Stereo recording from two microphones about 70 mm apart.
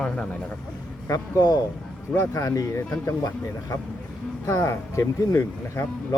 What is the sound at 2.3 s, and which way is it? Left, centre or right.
Speech, left.